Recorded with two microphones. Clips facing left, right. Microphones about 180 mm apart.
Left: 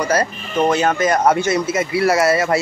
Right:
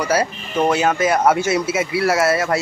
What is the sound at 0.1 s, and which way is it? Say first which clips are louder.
Speech: even; 10° right (ahead or behind).